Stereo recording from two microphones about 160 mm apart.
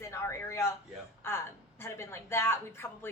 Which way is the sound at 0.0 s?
15° left (ahead or behind).